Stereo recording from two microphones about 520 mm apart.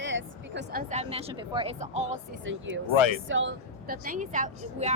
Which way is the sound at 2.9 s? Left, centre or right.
Left.